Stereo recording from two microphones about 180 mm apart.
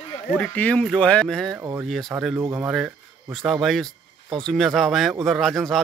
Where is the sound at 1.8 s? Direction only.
Centre (ahead or behind).